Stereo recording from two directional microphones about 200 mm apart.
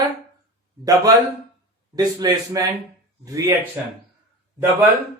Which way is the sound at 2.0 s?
15° right (ahead or behind).